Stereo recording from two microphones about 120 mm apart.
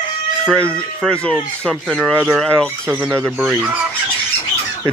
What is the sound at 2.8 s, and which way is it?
Speech, 15° right (ahead or behind).